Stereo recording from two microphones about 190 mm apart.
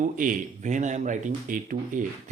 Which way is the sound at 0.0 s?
45° right (ahead or behind).